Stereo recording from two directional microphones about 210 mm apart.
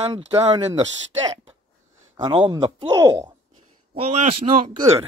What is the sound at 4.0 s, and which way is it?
Speech, 30° right (ahead or behind).